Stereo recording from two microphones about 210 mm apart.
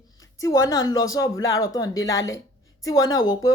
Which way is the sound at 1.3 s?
70° left (ahead or behind).